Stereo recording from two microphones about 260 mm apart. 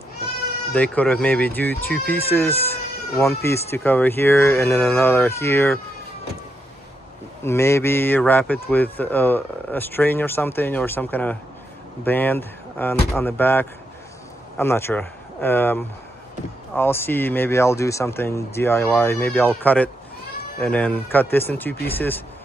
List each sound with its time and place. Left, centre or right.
0.7 s speech: centre
7.4 s speech: centre